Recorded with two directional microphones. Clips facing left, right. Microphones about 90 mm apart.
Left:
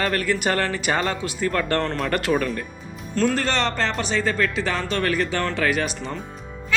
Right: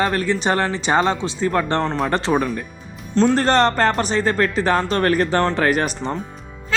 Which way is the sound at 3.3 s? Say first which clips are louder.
Right 7 dB; 40° right (ahead or behind).